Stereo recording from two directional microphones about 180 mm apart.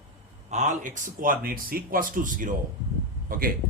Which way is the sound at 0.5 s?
40° right (ahead or behind).